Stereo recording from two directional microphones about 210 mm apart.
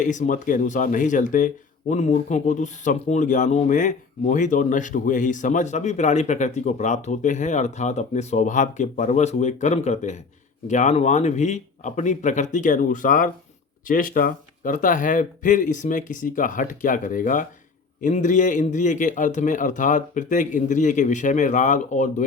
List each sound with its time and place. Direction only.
0.0 s speech: 35° left (ahead or behind)